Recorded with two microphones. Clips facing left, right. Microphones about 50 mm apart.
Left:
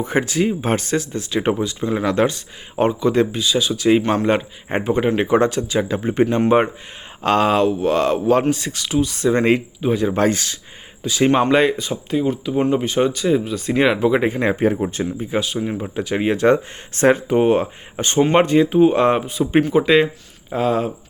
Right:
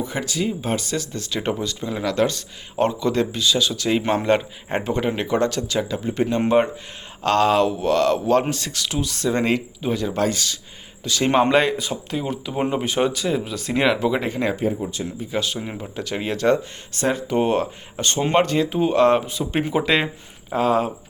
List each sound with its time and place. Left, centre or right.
0.0 s speech: left
1.1 s speech: centre
4.0 s speech: centre
4.3 s speech: centre
5.9 s speech: left
7.2 s speech: centre
10.1 s speech: left
11.0 s speech: centre
14.6 s speech: left
15.4 s speech: centre
15.8 s speech: centre
16.9 s speech: left
17.2 s speech: centre
17.9 s speech: left; by 20.9 s centre